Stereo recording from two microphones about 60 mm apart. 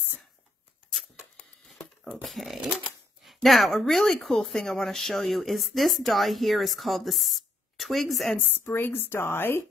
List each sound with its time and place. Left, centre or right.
2.2 s speech: centre
8.5 s a woman's voice: left